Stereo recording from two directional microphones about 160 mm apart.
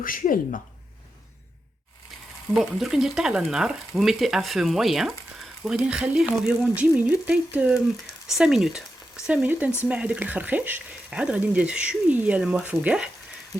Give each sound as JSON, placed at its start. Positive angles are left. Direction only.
{"t": 0.0, "sound": "speech", "side_deg": 60}
{"t": 2.6, "sound": "speech", "side_deg": 0}